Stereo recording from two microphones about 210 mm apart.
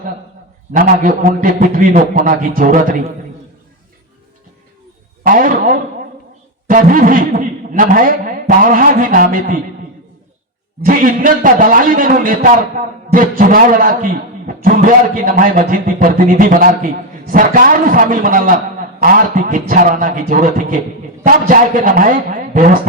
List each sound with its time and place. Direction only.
0.7 s a man's voice: 40° right (ahead or behind)
5.2 s a man's voice: 40° right (ahead or behind)
10.8 s a man's voice: 40° right (ahead or behind)